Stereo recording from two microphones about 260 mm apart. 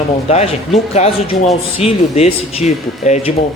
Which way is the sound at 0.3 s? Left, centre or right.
Left.